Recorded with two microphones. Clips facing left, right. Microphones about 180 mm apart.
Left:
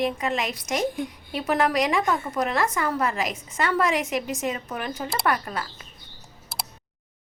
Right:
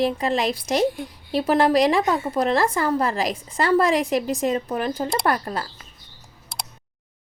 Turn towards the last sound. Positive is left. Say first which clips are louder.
# even
turn(degrees=0)  # may be behind; listen again after turning